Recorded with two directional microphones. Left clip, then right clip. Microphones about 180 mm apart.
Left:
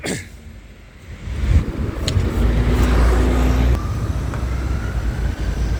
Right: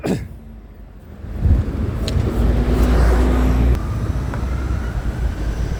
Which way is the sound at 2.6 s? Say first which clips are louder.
Even; 30° left (ahead or behind).